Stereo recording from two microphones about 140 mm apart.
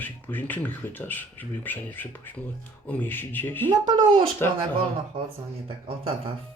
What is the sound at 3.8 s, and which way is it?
Speech, 35° right (ahead or behind).